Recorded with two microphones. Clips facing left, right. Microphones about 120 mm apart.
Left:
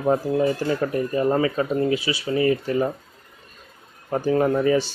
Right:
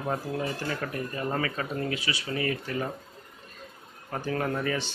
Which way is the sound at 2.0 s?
15° left (ahead or behind).